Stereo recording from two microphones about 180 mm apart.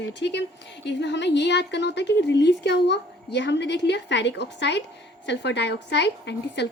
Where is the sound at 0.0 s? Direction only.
75° left (ahead or behind).